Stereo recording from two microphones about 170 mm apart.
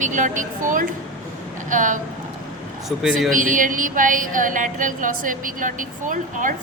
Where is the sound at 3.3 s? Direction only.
50° right (ahead or behind).